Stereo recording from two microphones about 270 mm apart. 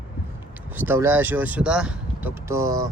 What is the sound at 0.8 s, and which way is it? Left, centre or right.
Speech, centre.